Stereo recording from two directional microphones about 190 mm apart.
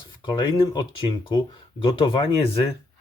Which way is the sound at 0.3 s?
20° left (ahead or behind).